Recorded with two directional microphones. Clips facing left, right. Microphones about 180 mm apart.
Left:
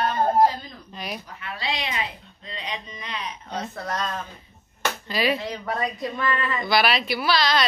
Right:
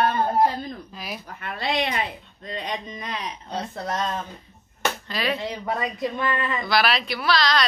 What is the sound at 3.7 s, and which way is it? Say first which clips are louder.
Speech: right 4 dB; 20° right (ahead or behind).